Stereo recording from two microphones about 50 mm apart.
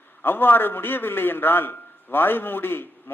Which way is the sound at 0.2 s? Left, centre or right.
Left.